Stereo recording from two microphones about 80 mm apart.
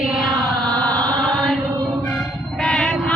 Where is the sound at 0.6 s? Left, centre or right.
Centre.